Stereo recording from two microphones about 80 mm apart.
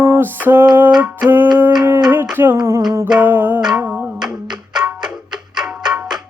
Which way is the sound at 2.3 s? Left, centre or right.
Right.